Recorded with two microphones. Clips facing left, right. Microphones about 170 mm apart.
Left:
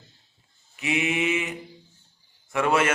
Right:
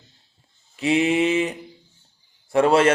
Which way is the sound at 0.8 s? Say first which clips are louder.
Right 7 dB; 30° right (ahead or behind).